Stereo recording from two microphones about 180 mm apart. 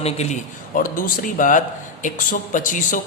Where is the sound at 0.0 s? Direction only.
40° left (ahead or behind).